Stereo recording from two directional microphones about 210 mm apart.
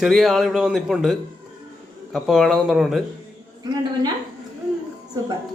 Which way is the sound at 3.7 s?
20° right (ahead or behind).